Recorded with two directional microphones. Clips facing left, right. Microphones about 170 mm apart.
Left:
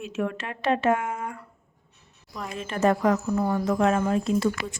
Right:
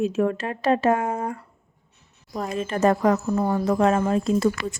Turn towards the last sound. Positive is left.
turn(degrees=-40)  # may be behind; listen again after turning